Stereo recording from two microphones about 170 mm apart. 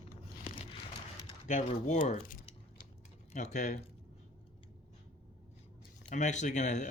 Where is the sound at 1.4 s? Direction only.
40° left (ahead or behind).